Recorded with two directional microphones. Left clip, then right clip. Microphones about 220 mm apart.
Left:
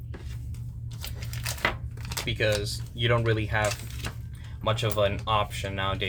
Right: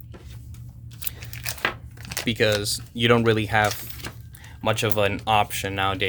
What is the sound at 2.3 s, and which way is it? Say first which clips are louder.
Speech: right 5 dB; 50° right (ahead or behind).